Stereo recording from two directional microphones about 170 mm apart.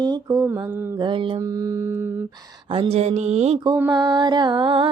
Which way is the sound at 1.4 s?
20° right (ahead or behind).